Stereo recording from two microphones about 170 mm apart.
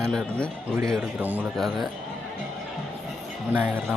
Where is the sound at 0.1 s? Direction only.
5° left (ahead or behind).